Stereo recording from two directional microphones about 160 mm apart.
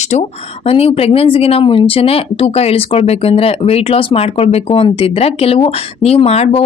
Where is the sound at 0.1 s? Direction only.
40° left (ahead or behind).